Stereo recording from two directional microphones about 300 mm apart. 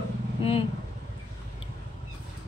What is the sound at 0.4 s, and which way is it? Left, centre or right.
Speech, centre.